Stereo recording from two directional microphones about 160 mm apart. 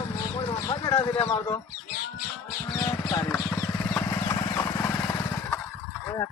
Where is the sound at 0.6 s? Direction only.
20° left (ahead or behind).